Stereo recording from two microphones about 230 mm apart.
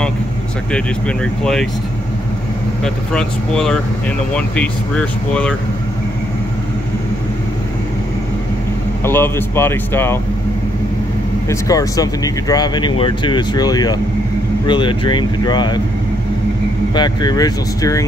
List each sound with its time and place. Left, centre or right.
0.7 s speech: centre
2.8 s speech: centre
9.0 s speech: centre
11.4 s speech: centre
16.9 s speech: centre